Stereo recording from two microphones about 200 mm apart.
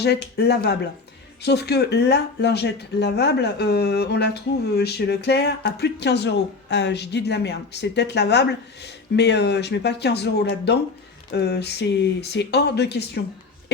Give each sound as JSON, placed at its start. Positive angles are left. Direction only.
{"t": 0.0, "sound": "speech", "side_deg": 55}